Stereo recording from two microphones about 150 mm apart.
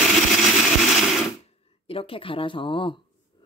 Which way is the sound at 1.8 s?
40° left (ahead or behind).